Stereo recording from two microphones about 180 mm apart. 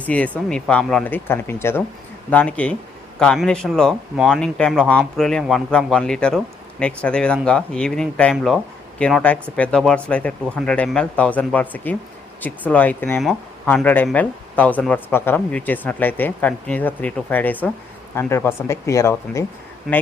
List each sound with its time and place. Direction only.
0.0 s speech: 5° left (ahead or behind)